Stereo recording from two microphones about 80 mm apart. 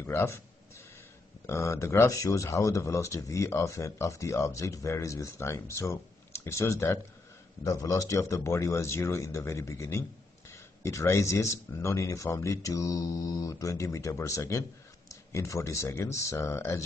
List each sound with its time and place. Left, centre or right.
0.0 s speech: left
1.5 s speech: left
7.6 s speech: left